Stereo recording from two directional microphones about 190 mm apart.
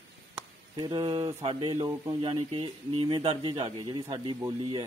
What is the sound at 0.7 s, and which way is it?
A man's voice, 20° right (ahead or behind).